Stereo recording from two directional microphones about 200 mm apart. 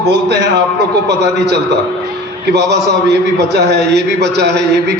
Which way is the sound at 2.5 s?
55° right (ahead or behind).